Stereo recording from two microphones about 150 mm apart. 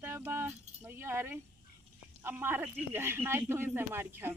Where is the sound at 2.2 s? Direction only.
15° right (ahead or behind).